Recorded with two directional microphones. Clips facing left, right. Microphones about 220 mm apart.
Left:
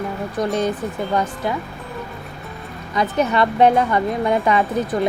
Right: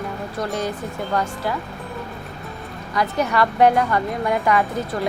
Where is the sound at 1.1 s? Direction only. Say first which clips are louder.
Left 1 dB; 20° left (ahead or behind).